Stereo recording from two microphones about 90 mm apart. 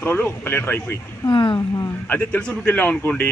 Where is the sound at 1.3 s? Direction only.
65° left (ahead or behind).